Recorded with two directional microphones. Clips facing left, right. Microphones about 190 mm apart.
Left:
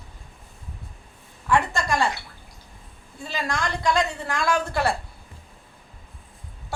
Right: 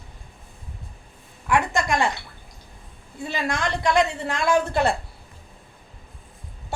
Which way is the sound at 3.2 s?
20° right (ahead or behind).